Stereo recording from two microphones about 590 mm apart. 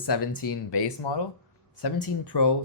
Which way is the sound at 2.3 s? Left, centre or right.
Left.